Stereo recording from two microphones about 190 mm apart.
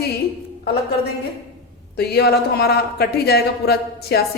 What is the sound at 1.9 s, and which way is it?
Speech, 60° left (ahead or behind).